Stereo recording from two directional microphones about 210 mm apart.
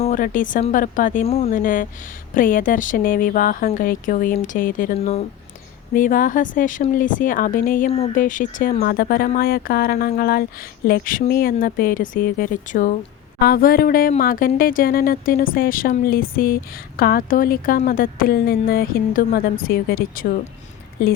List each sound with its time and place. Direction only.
0.0 s speech: 40° left (ahead or behind)
5.9 s speech: 40° left (ahead or behind)